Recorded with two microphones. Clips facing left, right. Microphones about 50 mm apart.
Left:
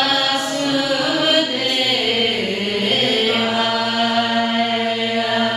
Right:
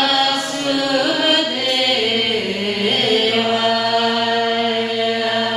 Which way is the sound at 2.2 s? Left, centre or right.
Centre.